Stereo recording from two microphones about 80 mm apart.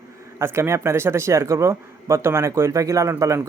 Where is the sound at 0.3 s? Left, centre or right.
Right.